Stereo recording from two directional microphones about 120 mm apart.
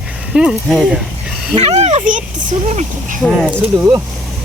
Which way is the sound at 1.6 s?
65° right (ahead or behind).